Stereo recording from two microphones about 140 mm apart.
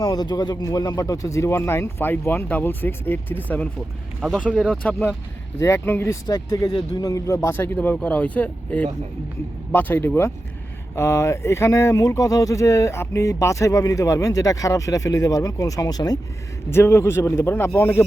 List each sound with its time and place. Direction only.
0.0 s speech: 30° left (ahead or behind); by 3.7 s 10° left (ahead or behind)
4.2 s speech: centre (ahead or behind)
4.8 s speech: 10° left (ahead or behind)